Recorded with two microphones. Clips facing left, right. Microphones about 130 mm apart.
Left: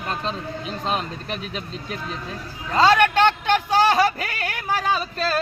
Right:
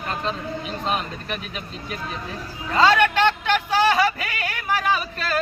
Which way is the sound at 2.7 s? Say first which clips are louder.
Left 1 dB; 40° left (ahead or behind).